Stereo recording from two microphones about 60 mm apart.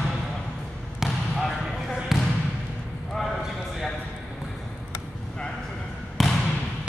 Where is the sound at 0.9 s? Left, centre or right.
Centre.